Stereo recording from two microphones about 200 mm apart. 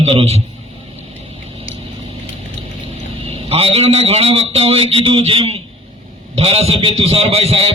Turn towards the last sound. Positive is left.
turn(degrees=-30)  # may be behind; listen again after turning